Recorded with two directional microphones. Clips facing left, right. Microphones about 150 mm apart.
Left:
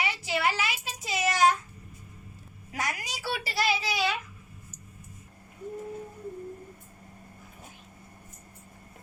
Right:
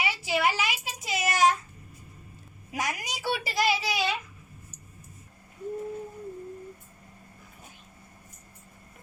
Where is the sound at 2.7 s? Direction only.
20° right (ahead or behind).